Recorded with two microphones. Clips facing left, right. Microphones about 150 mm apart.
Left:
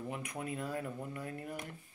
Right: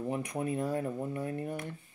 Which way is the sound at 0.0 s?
30° right (ahead or behind).